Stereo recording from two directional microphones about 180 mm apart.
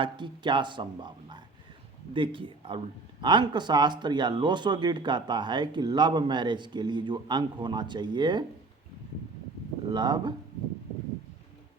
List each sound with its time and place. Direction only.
0.0 s speech: 25° right (ahead or behind)
9.9 s speech: 25° right (ahead or behind)